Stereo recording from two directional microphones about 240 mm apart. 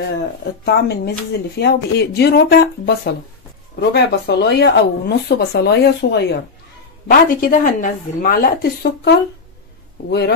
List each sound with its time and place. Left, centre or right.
0.1 s a woman's voice: left
3.9 s a woman's voice: left